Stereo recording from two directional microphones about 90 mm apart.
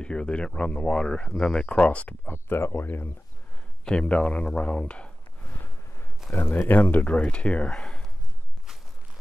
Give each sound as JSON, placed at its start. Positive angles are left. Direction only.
{"t": 0.0, "sound": "speech", "side_deg": 10}
{"t": 2.2, "sound": "speech", "side_deg": 25}
{"t": 3.8, "sound": "speech", "side_deg": 10}
{"t": 6.3, "sound": "speech", "side_deg": 25}